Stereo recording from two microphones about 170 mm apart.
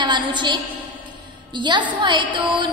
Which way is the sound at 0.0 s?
25° right (ahead or behind).